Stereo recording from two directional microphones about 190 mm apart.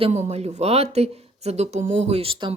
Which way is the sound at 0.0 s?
35° right (ahead or behind).